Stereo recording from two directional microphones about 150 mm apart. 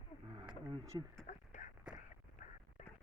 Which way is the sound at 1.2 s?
55° left (ahead or behind).